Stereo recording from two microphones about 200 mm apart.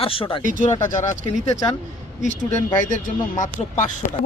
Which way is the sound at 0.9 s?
40° left (ahead or behind).